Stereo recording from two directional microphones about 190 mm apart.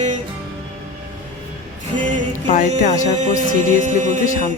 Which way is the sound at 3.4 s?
40° right (ahead or behind).